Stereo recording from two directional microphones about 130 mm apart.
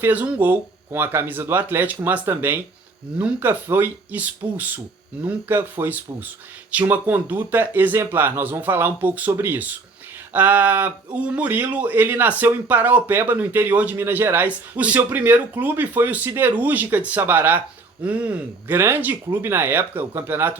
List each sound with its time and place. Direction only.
0.0 s speech: 15° right (ahead or behind)